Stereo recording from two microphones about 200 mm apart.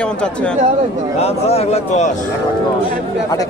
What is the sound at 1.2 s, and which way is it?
Speech, 30° left (ahead or behind).